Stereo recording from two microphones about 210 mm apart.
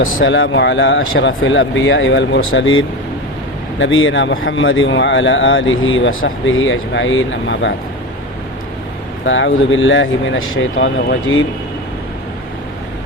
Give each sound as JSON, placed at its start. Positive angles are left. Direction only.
{"t": 0.0, "sound": "speech", "side_deg": 70}
{"t": 9.2, "sound": "speech", "side_deg": 65}